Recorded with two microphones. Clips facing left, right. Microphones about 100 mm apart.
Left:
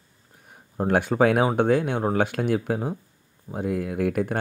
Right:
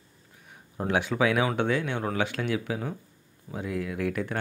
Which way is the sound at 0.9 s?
50° left (ahead or behind).